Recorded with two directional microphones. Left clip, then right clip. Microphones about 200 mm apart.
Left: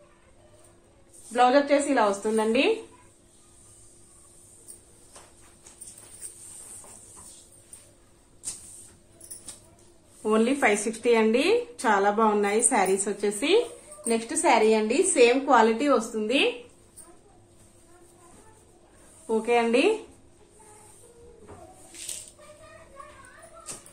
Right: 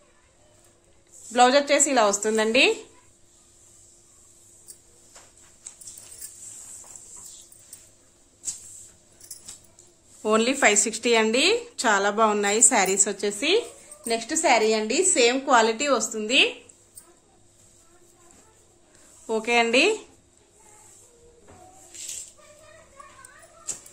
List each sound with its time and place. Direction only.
1.3 s a woman's voice: 60° right (ahead or behind)
10.2 s a woman's voice: 50° right (ahead or behind)
19.2 s a woman's voice: 55° right (ahead or behind)